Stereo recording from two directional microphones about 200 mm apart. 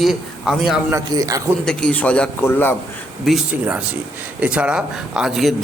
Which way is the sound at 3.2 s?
5° right (ahead or behind).